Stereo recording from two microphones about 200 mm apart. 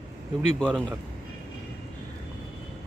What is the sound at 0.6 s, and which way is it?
Speech, 5° right (ahead or behind).